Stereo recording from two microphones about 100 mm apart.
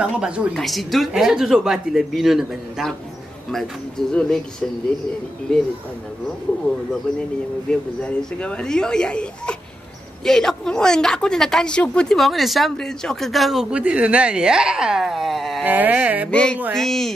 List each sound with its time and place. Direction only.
0.0 s a sound: 10° right (ahead or behind)
0.6 s a woman's voice: centre (ahead or behind)
4.1 s speech: 10° left (ahead or behind)
5.5 s speech: 10° left (ahead or behind)
7.7 s a woman's voice: 10° left (ahead or behind)
15.6 s a sound: 15° right (ahead or behind)
16.3 s a woman's voice: 10° left (ahead or behind)